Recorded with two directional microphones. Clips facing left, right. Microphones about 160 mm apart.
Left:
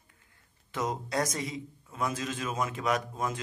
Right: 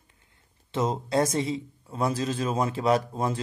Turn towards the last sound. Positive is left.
turn(degrees=-30)  # may be behind; listen again after turning